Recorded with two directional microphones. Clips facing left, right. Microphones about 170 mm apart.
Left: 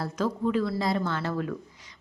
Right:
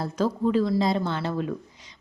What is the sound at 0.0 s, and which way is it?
Speech, 30° right (ahead or behind).